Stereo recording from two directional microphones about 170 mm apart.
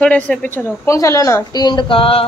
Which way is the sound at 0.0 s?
5° left (ahead or behind).